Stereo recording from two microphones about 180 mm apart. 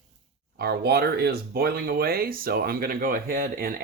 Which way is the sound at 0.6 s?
60° right (ahead or behind).